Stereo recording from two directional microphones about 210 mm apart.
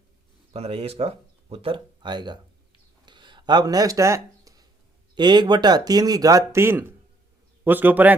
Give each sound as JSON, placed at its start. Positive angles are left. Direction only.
{"t": 0.5, "sound": "speech", "side_deg": -30}
{"t": 3.1, "sound": "a sound", "side_deg": -20}
{"t": 5.1, "sound": "a man's voice", "side_deg": -20}